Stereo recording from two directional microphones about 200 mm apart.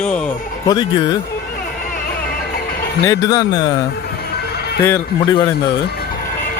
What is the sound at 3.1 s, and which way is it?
Speech, 20° left (ahead or behind).